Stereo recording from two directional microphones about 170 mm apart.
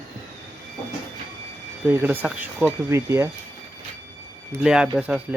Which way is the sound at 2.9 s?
15° right (ahead or behind).